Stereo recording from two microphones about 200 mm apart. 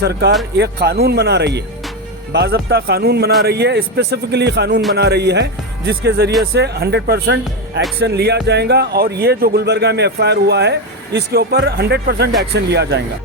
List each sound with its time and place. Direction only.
0.0 s speech: 55° right (ahead or behind)